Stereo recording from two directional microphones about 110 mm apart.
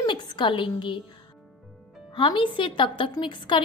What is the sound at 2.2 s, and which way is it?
A woman's voice, 50° left (ahead or behind).